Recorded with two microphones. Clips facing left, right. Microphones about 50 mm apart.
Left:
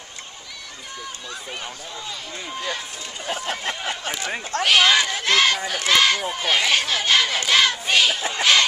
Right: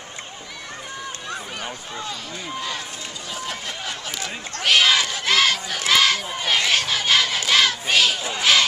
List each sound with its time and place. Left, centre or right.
1.6 s speech: centre
3.3 s speech: left
4.6 s speech: centre